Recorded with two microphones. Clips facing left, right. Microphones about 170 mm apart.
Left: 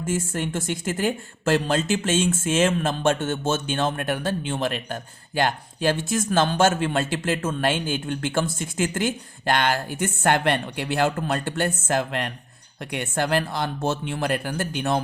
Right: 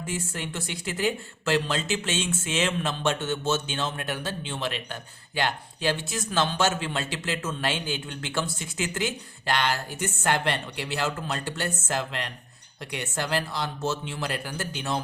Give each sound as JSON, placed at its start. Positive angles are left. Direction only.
{"t": 0.0, "sound": "speech", "side_deg": 45}